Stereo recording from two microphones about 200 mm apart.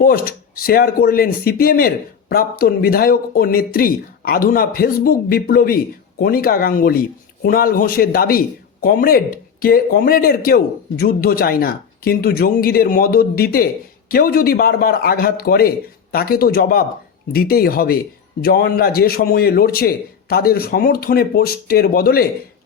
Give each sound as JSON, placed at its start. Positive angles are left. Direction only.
{"t": 0.0, "sound": "speech", "side_deg": 45}